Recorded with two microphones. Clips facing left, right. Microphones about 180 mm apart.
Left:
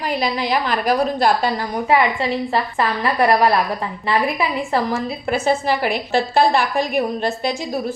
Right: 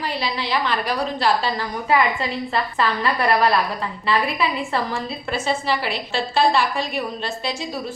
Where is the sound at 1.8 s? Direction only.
30° left (ahead or behind).